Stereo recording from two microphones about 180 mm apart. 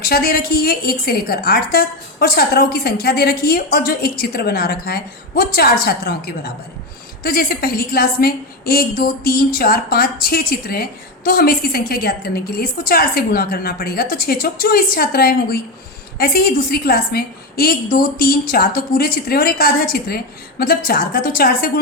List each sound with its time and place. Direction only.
0.0 s a woman's voice: 55° left (ahead or behind)